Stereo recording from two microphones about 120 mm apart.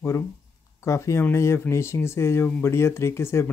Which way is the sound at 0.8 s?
25° left (ahead or behind).